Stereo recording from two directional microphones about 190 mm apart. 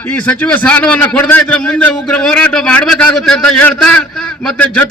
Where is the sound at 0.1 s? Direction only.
5° left (ahead or behind).